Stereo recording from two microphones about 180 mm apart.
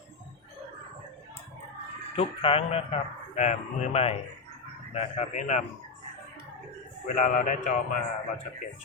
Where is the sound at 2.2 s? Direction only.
30° left (ahead or behind).